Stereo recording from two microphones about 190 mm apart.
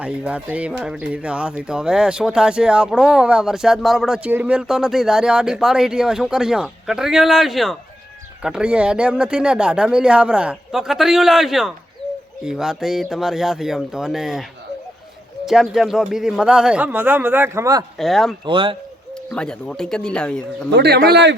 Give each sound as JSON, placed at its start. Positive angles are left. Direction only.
{"t": 0.0, "sound": "speech", "side_deg": -5}
{"t": 15.4, "sound": "speech", "side_deg": 0}
{"t": 17.9, "sound": "speech", "side_deg": 0}
{"t": 18.4, "sound": "a man's voice", "side_deg": -25}
{"t": 19.3, "sound": "speech", "side_deg": 5}
{"t": 20.7, "sound": "speech", "side_deg": -60}